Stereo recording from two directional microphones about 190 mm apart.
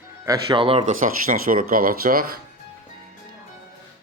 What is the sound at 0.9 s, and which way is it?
Speech, 45° right (ahead or behind).